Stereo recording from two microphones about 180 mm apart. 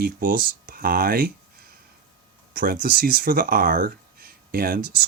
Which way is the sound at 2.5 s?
50° right (ahead or behind).